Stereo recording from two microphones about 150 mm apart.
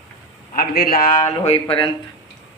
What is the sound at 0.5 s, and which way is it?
Speech, 85° left.